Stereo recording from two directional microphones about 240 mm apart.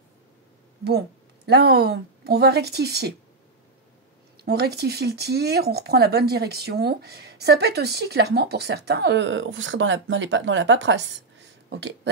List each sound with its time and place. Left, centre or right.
0.8 s a woman's voice: right
4.5 s speech: right